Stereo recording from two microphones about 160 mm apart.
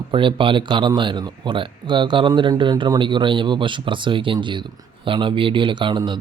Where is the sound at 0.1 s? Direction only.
30° right (ahead or behind).